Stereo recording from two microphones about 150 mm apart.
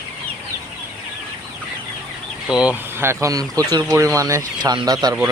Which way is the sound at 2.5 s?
5° right (ahead or behind).